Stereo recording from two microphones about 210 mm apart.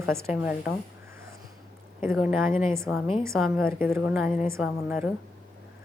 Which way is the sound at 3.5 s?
10° right (ahead or behind).